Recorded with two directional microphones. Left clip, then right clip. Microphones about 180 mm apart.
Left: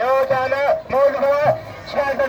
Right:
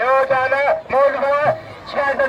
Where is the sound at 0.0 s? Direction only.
5° right (ahead or behind).